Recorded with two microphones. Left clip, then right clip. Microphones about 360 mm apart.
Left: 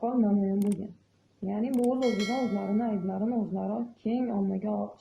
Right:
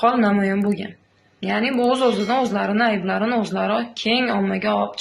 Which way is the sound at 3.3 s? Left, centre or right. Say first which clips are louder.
Right 12 dB; left.